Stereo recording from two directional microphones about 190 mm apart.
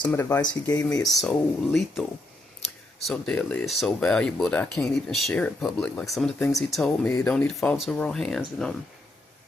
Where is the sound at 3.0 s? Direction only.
5° left (ahead or behind).